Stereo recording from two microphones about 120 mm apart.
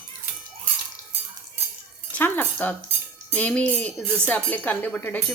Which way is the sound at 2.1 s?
15° left (ahead or behind).